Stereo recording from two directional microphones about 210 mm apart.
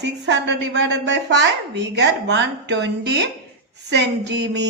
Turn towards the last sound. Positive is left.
turn(degrees=-55)  # may be behind; listen again after turning